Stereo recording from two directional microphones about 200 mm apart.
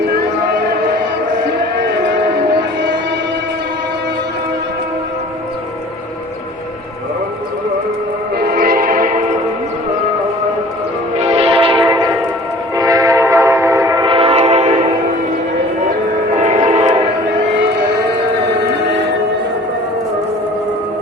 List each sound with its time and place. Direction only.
8.4 s train: 50° right (ahead or behind)
11.2 s train horn: 30° right (ahead or behind)
12.7 s train: 20° right (ahead or behind)
16.3 s train: 40° right (ahead or behind)